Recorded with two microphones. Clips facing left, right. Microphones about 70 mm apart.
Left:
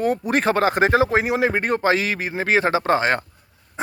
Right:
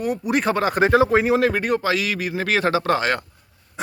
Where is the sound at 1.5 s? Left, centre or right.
Left.